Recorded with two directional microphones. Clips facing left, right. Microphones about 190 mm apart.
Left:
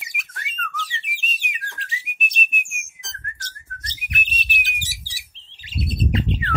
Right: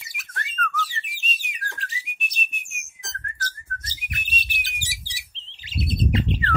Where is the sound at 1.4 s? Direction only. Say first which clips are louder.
Even; centre (ahead or behind).